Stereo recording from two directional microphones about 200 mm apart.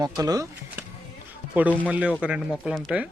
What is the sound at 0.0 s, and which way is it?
Speech, 20° right (ahead or behind).